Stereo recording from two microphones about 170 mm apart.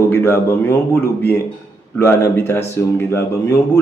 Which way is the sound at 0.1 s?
15° left (ahead or behind).